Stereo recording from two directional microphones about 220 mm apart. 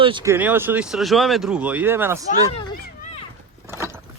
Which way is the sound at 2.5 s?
25° left (ahead or behind).